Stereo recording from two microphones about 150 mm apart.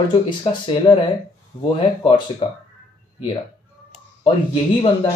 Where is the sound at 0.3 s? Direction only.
30° left (ahead or behind).